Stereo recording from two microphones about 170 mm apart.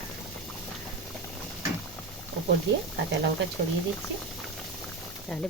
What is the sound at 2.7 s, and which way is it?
Speech, 90° right.